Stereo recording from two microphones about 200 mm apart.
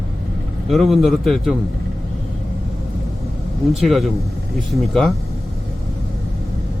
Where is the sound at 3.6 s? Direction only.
Centre (ahead or behind).